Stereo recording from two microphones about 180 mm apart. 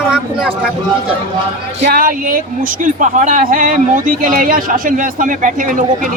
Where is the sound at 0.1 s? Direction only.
5° right (ahead or behind).